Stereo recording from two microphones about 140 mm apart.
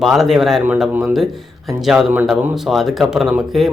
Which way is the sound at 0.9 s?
10° right (ahead or behind).